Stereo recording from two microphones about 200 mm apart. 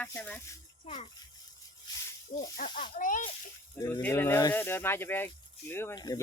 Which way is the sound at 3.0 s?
40° left (ahead or behind).